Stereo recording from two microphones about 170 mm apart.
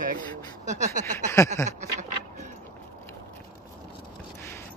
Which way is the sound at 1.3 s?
15° left (ahead or behind).